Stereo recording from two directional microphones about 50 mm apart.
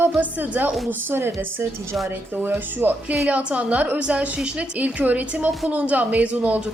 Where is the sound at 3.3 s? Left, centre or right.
Right.